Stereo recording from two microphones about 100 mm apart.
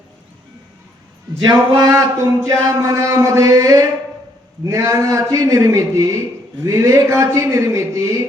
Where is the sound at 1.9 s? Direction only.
30° right (ahead or behind).